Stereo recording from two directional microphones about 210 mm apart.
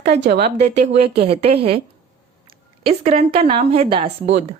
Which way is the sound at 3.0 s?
30° right (ahead or behind).